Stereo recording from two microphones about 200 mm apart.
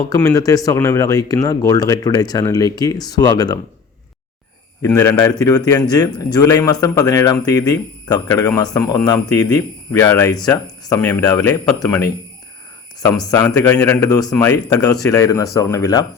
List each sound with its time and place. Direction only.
0.1 s a man's voice: 15° left (ahead or behind)
4.9 s a man's voice: 15° left (ahead or behind)
13.1 s a man's voice: 20° left (ahead or behind)